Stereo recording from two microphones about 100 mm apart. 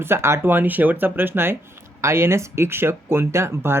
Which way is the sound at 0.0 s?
25° right (ahead or behind).